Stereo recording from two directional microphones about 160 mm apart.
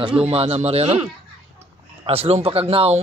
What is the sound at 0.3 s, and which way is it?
Speech, 40° right (ahead or behind).